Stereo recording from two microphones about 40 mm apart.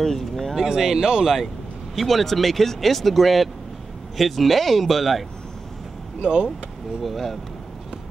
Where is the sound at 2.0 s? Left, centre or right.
Centre.